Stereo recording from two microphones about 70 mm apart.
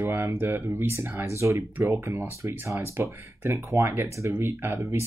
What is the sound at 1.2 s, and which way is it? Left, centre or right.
Speech, right.